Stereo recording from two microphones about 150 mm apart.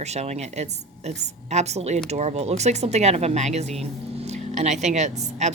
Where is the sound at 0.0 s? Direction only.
45° right (ahead or behind).